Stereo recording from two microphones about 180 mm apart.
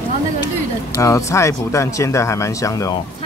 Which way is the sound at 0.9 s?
15° left (ahead or behind).